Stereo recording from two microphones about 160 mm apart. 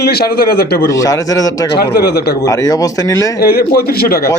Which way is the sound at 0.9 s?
20° left (ahead or behind).